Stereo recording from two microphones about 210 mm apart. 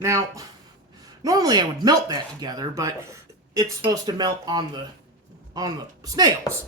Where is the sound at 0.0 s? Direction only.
15° right (ahead or behind).